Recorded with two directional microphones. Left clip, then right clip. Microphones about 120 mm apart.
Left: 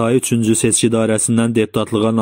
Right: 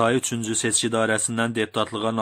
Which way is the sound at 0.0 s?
35° left (ahead or behind).